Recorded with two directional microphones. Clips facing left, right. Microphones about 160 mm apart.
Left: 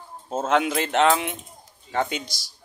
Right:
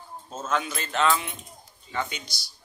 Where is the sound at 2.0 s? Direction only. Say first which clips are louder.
Left 8 dB; 90° left.